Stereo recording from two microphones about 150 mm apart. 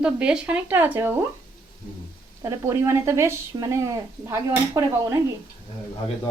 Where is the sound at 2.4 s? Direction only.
20° right (ahead or behind).